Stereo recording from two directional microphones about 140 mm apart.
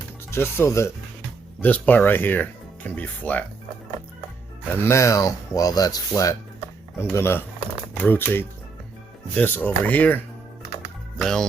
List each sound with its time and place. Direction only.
0.3 s speech: 15° left (ahead or behind)
4.8 s speech: 20° left (ahead or behind)
11.2 s music: 5° left (ahead or behind)